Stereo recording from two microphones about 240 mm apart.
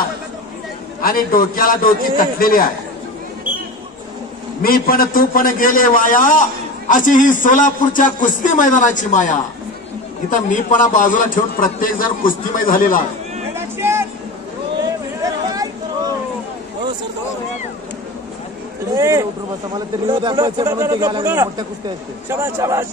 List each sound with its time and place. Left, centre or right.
1.0 s a man's voice: left
4.6 s a man's voice: left
13.6 s vehicle: centre
15.2 s chatter: centre
18.9 s a man's voice: centre